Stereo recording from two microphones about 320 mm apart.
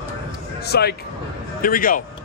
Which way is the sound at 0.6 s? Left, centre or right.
Left.